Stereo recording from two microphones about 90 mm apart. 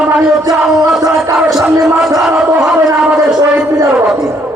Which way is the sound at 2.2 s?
5° right (ahead or behind).